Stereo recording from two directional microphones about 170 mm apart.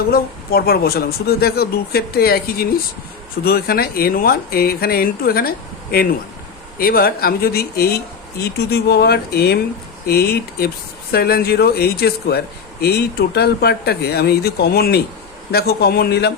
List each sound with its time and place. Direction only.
0.1 s speech: 65° left (ahead or behind)